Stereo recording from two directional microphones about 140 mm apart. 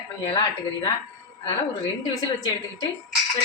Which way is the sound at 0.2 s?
35° left (ahead or behind).